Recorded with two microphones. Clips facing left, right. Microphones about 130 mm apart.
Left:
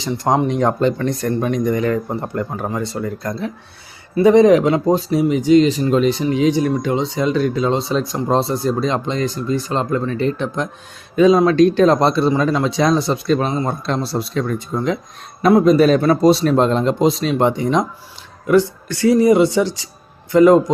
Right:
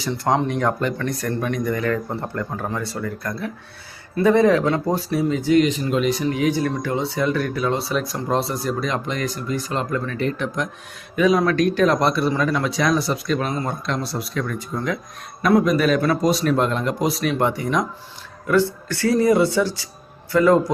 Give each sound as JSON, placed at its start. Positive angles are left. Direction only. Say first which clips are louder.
{"t": 0.0, "sound": "speech", "louder": "left 3 dB", "side_deg": 15}
{"t": 5.6, "sound": "speech", "louder": "left 5 dB", "side_deg": 35}
{"t": 6.2, "sound": "speech", "louder": "left 4 dB", "side_deg": 20}